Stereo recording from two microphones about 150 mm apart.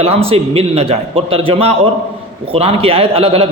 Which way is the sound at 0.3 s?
45° right (ahead or behind).